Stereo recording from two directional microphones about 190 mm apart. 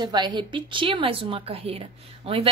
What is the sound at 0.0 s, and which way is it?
A woman's voice, 25° right (ahead or behind).